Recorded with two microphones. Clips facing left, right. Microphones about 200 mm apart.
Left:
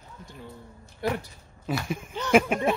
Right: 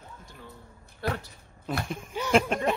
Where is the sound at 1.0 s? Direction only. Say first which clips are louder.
Left 3 dB; 15° left (ahead or behind).